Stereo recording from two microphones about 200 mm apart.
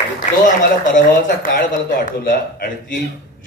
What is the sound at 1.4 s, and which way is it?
A man's voice, 45° left (ahead or behind).